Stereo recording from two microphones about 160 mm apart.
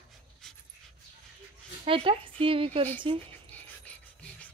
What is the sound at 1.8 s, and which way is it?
Speech, 35° right (ahead or behind).